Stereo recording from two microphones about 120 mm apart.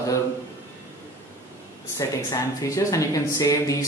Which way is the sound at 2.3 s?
25° left (ahead or behind).